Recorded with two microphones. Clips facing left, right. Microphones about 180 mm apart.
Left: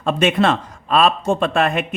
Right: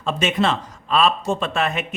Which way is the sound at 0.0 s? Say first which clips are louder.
Left 4 dB; 55° left (ahead or behind).